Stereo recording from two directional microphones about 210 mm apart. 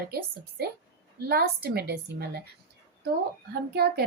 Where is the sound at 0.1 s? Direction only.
45° right (ahead or behind).